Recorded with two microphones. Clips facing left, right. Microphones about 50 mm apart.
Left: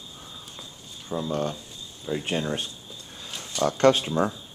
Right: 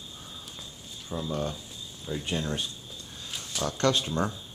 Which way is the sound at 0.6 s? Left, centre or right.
Centre.